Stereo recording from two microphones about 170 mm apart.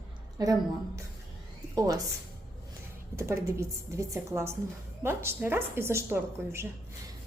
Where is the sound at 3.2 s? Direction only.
15° right (ahead or behind).